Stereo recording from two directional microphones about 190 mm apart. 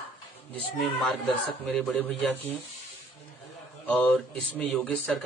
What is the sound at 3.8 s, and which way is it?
Speech, 5° left (ahead or behind).